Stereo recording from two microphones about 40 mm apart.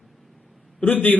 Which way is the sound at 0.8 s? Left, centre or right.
Left.